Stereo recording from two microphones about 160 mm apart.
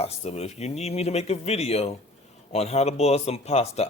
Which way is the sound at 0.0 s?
40° left (ahead or behind).